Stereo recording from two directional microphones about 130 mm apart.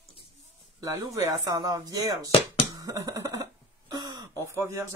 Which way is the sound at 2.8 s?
25° right (ahead or behind).